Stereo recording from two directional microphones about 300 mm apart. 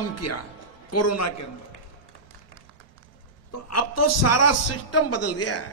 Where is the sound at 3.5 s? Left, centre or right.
Left.